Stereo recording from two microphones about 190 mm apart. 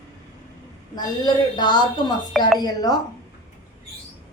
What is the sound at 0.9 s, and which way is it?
A woman's voice, 20° left (ahead or behind).